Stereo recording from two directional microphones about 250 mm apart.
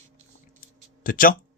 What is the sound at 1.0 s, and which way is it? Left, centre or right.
Speech, left.